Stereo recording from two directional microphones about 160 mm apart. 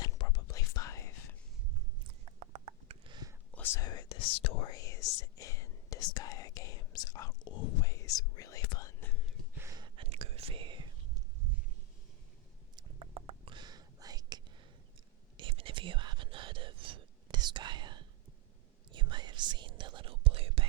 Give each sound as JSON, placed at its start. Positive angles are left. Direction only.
{"t": 0.0, "sound": "whispering", "side_deg": 25}
{"t": 2.0, "sound": "a sound", "side_deg": -40}
{"t": 3.5, "sound": "whispering", "side_deg": 15}
{"t": 9.6, "sound": "whispering", "side_deg": -20}
{"t": 12.7, "sound": "whispering", "side_deg": -35}